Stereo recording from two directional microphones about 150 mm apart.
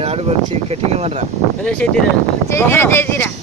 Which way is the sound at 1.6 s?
5° left (ahead or behind).